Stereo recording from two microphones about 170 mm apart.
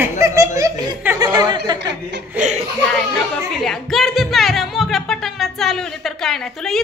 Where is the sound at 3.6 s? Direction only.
Centre (ahead or behind).